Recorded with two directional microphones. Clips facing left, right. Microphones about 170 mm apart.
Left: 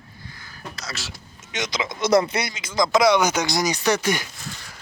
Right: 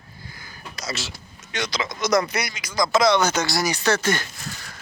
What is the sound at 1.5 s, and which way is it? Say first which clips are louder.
Speech: even; 20° left (ahead or behind).